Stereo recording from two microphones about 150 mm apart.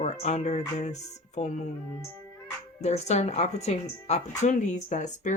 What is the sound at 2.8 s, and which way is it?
Speech, 50° left (ahead or behind).